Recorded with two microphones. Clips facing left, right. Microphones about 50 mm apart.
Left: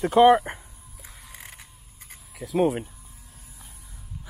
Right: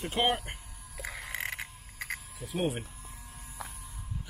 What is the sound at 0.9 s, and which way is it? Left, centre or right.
Burping, right.